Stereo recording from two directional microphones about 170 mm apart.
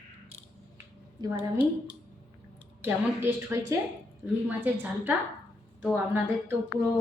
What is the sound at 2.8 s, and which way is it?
A woman's voice, 15° right (ahead or behind).